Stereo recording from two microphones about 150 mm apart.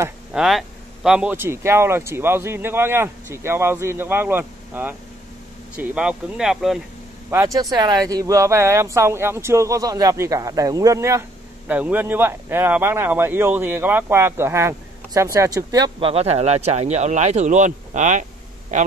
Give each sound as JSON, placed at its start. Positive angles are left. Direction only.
{"t": 0.3, "sound": "a sound", "side_deg": -5}
{"t": 1.3, "sound": "speech", "side_deg": -15}
{"t": 7.2, "sound": "speech", "side_deg": -20}
{"t": 16.0, "sound": "speech", "side_deg": -40}